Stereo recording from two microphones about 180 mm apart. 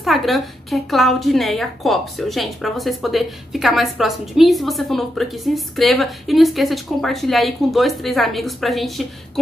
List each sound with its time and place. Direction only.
0.0 s speech: centre (ahead or behind)